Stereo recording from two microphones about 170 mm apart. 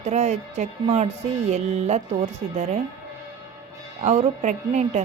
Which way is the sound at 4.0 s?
40° right (ahead or behind).